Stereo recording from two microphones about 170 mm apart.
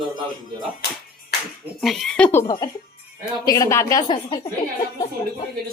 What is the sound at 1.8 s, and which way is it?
A woman's voice, centre (ahead or behind).